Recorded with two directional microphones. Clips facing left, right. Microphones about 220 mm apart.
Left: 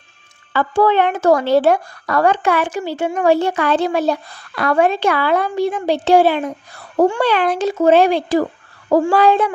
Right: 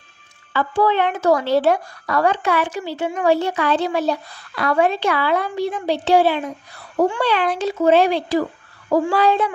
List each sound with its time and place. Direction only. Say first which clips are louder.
0.5 s speech: left 4 dB; 55° left (ahead or behind)